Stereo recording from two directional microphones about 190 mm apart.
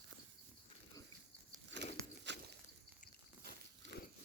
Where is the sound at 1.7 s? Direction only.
70° right (ahead or behind).